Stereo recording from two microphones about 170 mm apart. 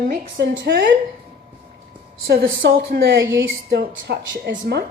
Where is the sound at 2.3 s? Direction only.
80° right.